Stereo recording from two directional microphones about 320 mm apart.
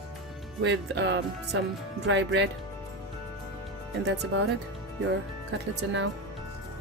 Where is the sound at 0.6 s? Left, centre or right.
Right.